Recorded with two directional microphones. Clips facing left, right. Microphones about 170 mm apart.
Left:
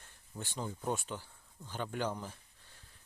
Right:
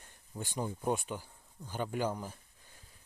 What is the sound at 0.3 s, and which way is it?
Speech, 15° right (ahead or behind).